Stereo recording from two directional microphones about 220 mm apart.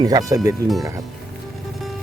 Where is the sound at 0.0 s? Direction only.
15° right (ahead or behind).